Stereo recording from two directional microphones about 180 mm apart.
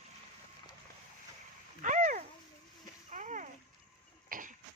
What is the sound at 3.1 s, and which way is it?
Splash, 45° right (ahead or behind).